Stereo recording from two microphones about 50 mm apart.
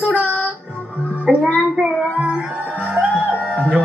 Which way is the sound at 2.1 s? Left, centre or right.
Right.